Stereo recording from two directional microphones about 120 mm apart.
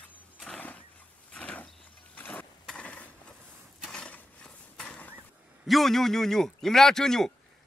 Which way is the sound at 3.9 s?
10° left (ahead or behind).